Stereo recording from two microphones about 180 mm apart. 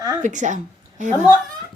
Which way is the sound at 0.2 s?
45° right (ahead or behind).